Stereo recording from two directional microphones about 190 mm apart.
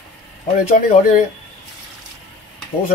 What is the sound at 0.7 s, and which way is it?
Speech, 45° left (ahead or behind).